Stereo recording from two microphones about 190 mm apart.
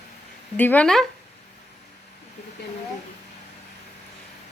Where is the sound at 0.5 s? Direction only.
10° left (ahead or behind).